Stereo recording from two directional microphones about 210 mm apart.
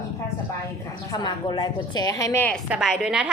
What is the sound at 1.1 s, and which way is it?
Speech, 20° left (ahead or behind).